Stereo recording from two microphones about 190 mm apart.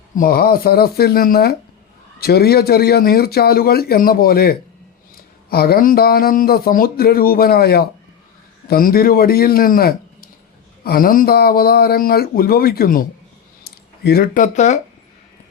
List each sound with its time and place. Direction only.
0.2 s speech: 50° left (ahead or behind)